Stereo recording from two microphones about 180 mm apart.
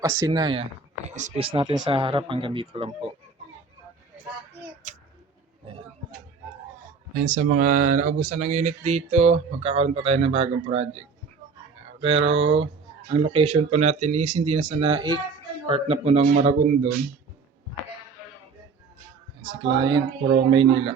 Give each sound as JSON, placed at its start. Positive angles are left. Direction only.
{"t": 0.0, "sound": "speech", "side_deg": -20}
{"t": 7.2, "sound": "speech", "side_deg": -50}
{"t": 12.0, "sound": "speech", "side_deg": -35}
{"t": 14.8, "sound": "speech", "side_deg": -30}
{"t": 19.5, "sound": "speech", "side_deg": -25}